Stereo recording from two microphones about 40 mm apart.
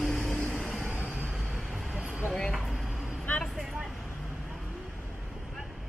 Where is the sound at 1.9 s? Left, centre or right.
Centre.